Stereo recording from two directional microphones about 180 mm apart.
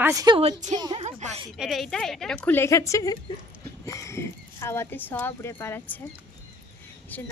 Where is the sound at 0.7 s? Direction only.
25° right (ahead or behind).